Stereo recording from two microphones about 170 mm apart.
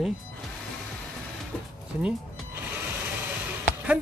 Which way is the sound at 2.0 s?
5° right (ahead or behind).